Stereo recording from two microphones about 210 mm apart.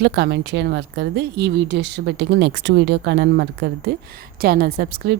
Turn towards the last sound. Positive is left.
turn(degrees=-50)  # may be behind; listen again after turning